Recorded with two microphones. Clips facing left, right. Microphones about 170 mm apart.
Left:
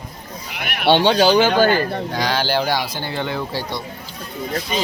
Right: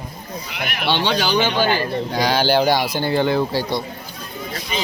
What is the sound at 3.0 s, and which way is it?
Speech, 35° right (ahead or behind).